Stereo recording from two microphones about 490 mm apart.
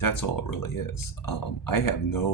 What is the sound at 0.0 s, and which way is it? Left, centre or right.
Speech, left.